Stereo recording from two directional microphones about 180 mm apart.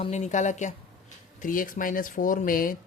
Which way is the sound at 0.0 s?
40° left (ahead or behind).